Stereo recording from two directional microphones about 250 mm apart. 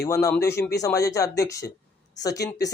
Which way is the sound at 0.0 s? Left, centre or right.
Centre.